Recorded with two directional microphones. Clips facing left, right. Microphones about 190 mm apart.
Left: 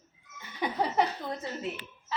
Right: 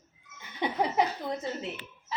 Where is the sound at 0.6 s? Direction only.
25° right (ahead or behind).